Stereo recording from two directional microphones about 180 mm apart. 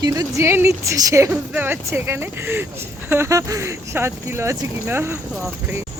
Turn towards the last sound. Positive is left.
turn(degrees=-15)  # may be behind; listen again after turning